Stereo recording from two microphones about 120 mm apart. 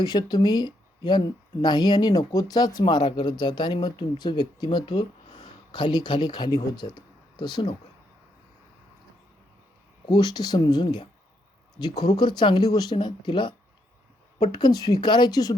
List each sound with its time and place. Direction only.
0.0 s speech: 35° left (ahead or behind)
10.1 s speech: 35° left (ahead or behind)